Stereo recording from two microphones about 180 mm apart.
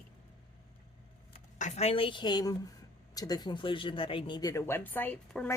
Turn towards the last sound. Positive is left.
turn(degrees=10)  # may be behind; listen again after turning